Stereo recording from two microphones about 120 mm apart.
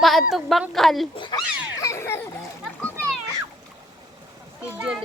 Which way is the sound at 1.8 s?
25° left (ahead or behind).